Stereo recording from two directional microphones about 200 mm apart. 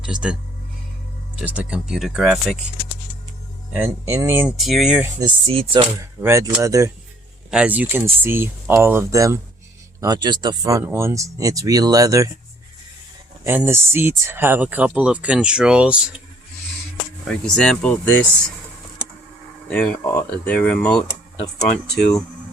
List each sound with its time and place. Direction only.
0.0 s speech: 5° right (ahead or behind)
1.4 s speech: 5° right (ahead or behind)
3.7 s speech: 10° right (ahead or behind)
4.5 s speech: centre (ahead or behind)
5.2 s speech: 25° right (ahead or behind)
6.2 s speech: 15° right (ahead or behind)
13.4 s speech: 10° right (ahead or behind)
17.2 s speech: centre (ahead or behind)
19.7 s speech: 5° left (ahead or behind)